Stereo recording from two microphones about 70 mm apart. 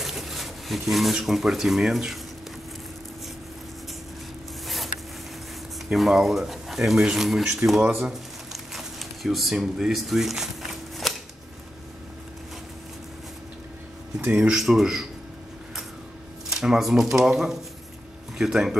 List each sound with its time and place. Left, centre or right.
0.0 s speech: centre
5.9 s speech: centre
8.7 s a sound: centre
14.3 s speech: centre
14.6 s speech: centre
16.4 s speech: centre